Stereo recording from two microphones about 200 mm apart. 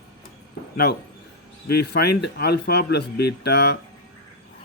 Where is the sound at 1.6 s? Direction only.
55° left (ahead or behind).